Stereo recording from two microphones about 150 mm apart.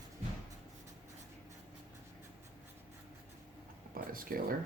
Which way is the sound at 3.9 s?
70° right (ahead or behind).